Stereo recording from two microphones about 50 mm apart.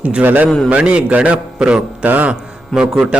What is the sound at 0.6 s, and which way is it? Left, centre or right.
A man's voice, right.